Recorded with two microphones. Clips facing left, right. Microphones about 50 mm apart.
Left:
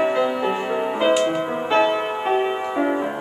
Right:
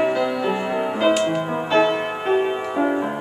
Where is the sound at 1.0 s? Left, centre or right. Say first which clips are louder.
Even; centre.